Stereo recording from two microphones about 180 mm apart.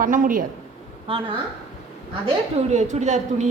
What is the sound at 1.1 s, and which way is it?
A woman's voice, 30° right (ahead or behind).